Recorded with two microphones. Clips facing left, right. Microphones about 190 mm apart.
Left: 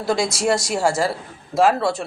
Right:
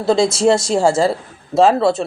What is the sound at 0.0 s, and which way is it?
Speech, 25° right (ahead or behind).